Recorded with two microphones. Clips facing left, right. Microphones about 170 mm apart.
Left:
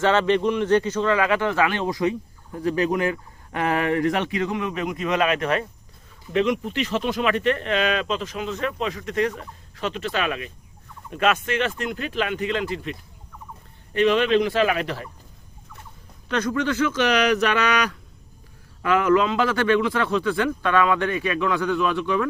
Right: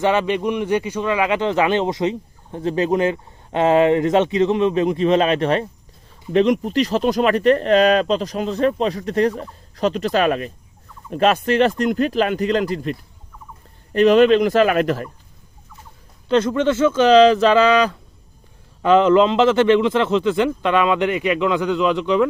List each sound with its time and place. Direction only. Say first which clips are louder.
0.0 s speech: right 1 dB; 15° right (ahead or behind); by 15.0 s 45° right (ahead or behind)
16.3 s speech: right 7 dB; 25° right (ahead or behind)